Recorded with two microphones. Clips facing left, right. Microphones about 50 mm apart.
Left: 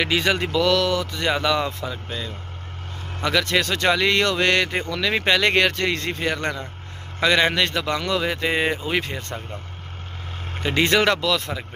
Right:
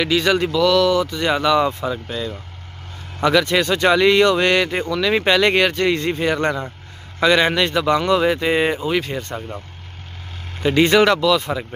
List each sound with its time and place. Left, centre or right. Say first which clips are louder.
0.0 s a man's voice: right 4 dB; centre
8.0 s speech: right 7 dB; centre
8.3 s a man's voice: right 4 dB; centre
10.6 s a man's voice: right 5 dB; centre